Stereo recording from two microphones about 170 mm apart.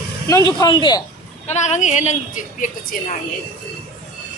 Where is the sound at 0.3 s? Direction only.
20° left (ahead or behind).